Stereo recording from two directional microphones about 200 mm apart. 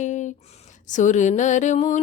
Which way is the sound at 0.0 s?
35° left (ahead or behind).